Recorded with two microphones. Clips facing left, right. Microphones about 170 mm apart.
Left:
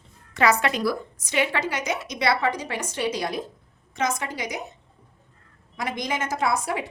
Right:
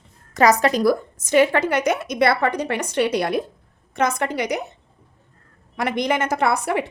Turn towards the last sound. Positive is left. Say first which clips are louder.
# right 5 dB
turn(degrees=-65)  # may be behind; listen again after turning